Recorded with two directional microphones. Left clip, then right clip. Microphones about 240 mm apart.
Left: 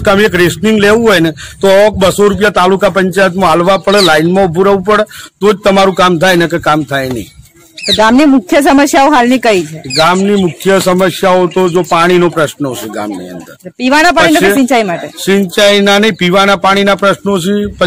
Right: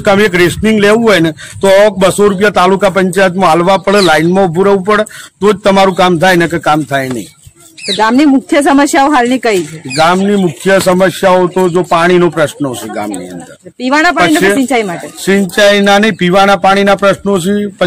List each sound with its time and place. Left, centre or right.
0.0 s a man's voice: centre
7.8 s speech: left
9.9 s a man's voice: centre
13.7 s a man's voice: left
15.2 s a man's voice: centre